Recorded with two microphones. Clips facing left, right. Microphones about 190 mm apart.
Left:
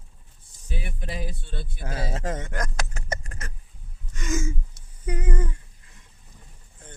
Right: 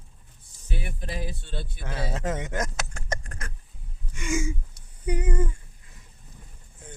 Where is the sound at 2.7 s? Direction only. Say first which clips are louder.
Left 1 dB; centre (ahead or behind).